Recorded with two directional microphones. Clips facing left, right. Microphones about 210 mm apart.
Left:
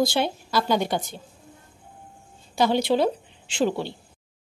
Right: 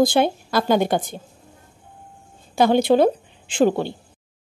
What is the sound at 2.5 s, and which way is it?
A woman's voice, 55° right (ahead or behind).